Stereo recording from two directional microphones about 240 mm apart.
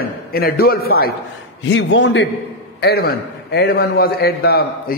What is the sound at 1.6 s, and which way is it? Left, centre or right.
A man's voice, left.